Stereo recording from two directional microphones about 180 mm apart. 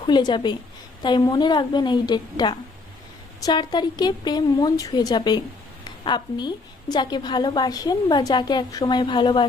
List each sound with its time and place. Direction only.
0.0 s a woman's voice: 25° left (ahead or behind)